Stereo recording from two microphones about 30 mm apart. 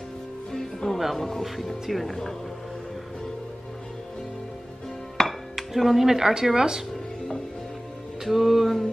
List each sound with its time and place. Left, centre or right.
0.5 s music: centre
0.8 s speech: centre
1.1 s speech: centre
1.9 s music: centre
5.2 s music: centre
6.0 s speech: centre
8.2 s music: centre